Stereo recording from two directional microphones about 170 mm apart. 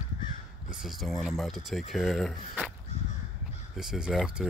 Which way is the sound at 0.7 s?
Centre (ahead or behind).